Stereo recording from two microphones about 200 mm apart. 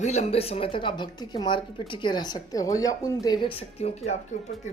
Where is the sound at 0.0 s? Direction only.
35° left (ahead or behind).